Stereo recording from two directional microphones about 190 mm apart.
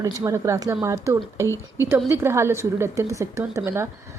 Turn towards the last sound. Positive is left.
turn(degrees=-15)  # may be behind; listen again after turning